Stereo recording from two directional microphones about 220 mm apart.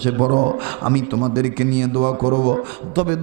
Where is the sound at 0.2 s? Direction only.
30° right (ahead or behind).